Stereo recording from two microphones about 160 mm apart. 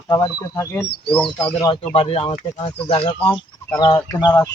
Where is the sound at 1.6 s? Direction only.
30° left (ahead or behind).